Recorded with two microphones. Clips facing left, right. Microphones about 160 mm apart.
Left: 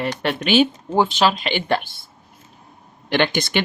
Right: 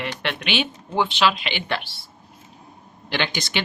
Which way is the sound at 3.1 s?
50° left (ahead or behind).